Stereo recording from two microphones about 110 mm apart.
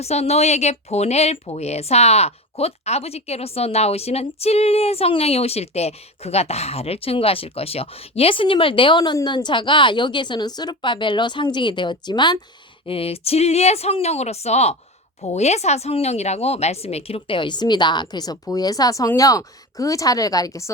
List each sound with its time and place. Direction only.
0.0 s a woman's voice: 75° left (ahead or behind); by 12.4 s 40° left (ahead or behind)
12.8 s speech: 60° left (ahead or behind); by 20.7 s 30° left (ahead or behind)